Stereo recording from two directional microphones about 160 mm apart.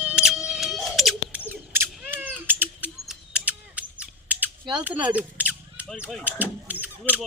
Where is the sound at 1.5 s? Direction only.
10° right (ahead or behind).